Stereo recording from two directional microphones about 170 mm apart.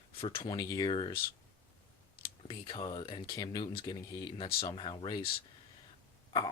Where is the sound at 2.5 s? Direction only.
30° left (ahead or behind).